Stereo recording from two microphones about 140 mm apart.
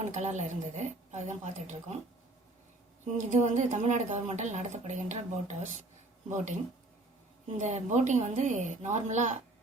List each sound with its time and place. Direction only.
0.0 s a woman's voice: 60° right (ahead or behind)
3.2 s a woman's voice: 60° right (ahead or behind)